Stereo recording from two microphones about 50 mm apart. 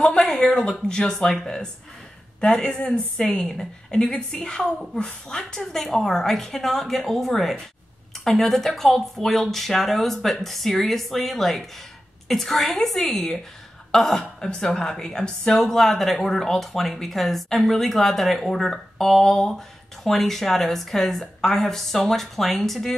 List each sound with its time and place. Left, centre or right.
0.0 s a woman's voice: centre
3.4 s a woman's voice: centre
15.6 s speech: centre